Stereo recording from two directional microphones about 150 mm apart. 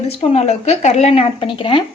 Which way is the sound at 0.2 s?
45° left (ahead or behind).